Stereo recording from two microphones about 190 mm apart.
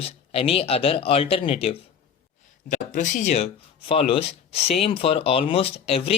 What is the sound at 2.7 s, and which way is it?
Speech, 40° left (ahead or behind).